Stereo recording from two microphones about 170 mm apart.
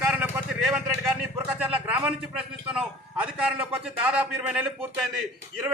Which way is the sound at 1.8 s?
10° right (ahead or behind).